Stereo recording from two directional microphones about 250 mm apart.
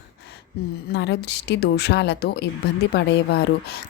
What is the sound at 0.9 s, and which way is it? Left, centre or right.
A woman's voice, left.